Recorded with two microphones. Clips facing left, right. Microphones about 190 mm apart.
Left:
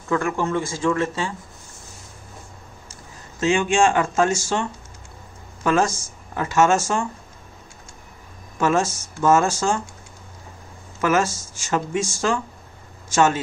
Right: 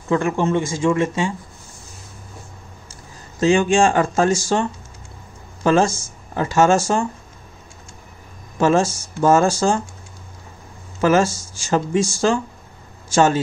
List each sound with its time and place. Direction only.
0.1 s speech: 20° right (ahead or behind)
3.3 s speech: 35° right (ahead or behind)
8.5 s speech: 30° right (ahead or behind)
11.0 s speech: 30° right (ahead or behind)